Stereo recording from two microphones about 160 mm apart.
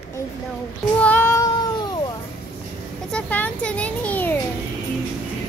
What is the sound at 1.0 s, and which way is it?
Child singing, 10° left (ahead or behind).